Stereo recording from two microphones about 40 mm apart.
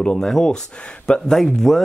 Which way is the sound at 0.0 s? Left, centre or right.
Centre.